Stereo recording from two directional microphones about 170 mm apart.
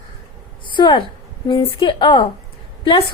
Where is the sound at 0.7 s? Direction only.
30° left (ahead or behind).